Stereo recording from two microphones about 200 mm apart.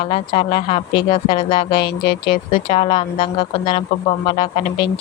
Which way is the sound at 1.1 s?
45° left (ahead or behind).